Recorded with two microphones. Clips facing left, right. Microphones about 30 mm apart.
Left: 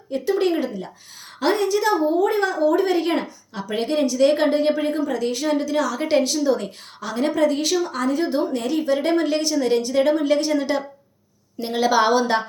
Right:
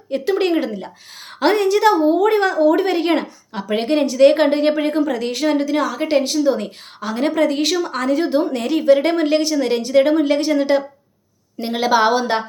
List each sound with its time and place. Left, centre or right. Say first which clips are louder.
0.1 s a woman's voice: right 3 dB; right
3.6 s a woman's voice: right 4 dB; right
6.0 s a woman's voice: right 2 dB; right
11.7 s a woman's voice: right 2 dB; right